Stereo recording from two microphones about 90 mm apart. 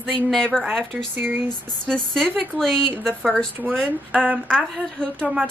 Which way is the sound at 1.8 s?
5° left (ahead or behind).